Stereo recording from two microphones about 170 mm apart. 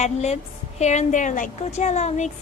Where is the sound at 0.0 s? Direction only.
40° left (ahead or behind).